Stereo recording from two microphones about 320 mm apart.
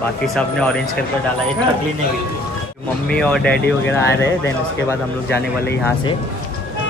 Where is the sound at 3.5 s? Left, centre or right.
Left.